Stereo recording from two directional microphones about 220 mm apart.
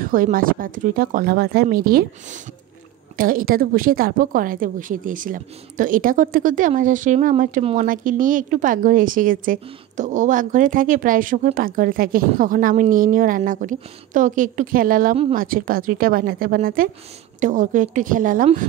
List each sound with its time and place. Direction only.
0.0 s a woman's voice: 40° right (ahead or behind)
3.2 s a woman's voice: 40° right (ahead or behind)